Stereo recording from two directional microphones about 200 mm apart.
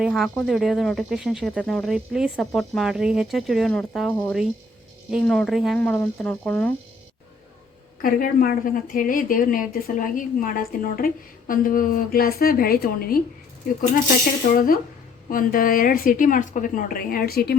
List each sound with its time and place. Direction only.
0.0 s speech: centre (ahead or behind)
8.0 s a woman's voice: 45° left (ahead or behind)
14.4 s a woman's voice: 45° left (ahead or behind)